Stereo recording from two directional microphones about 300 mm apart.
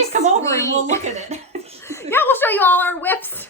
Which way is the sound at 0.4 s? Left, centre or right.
Centre.